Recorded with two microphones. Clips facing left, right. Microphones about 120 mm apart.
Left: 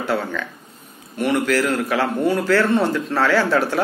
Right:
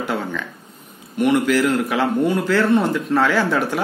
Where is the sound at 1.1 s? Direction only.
15° right (ahead or behind).